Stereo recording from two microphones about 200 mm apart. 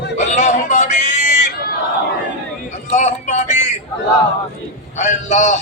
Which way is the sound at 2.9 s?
35° left (ahead or behind).